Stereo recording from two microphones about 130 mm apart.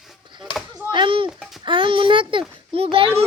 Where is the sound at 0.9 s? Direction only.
40° right (ahead or behind).